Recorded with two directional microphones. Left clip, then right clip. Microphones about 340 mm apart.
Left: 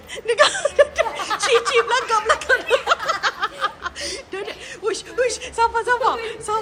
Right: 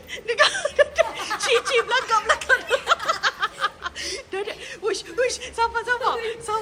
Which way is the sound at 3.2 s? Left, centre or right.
Centre.